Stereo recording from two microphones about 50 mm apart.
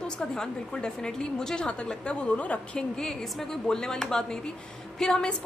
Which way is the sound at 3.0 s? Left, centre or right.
Centre.